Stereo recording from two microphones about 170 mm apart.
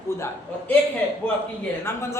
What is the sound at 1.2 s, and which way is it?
Speech, 10° left (ahead or behind).